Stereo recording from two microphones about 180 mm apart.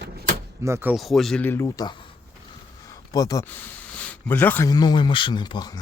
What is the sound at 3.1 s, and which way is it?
Speech, 20° left (ahead or behind).